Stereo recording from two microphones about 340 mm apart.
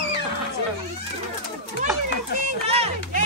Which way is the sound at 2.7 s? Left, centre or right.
Centre.